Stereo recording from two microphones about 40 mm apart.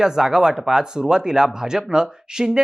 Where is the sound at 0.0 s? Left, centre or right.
Centre.